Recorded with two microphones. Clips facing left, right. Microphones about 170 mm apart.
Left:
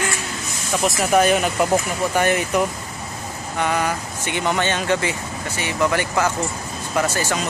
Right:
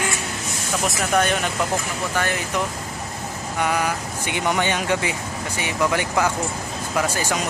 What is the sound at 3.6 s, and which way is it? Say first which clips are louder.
Speech: left 1 dB; 10° right (ahead or behind).